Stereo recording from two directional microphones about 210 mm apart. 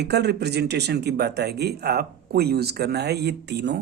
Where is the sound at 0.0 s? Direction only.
50° right (ahead or behind).